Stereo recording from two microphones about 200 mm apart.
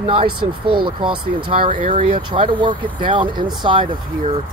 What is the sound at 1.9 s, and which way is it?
Speech, 25° right (ahead or behind).